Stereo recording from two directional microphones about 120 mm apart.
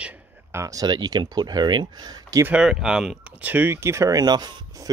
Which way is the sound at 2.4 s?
10° right (ahead or behind).